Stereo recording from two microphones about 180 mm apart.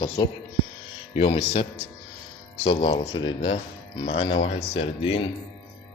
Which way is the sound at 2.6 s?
30° left (ahead or behind).